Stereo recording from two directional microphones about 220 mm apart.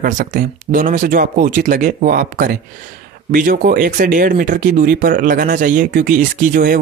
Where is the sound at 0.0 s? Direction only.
35° right (ahead or behind).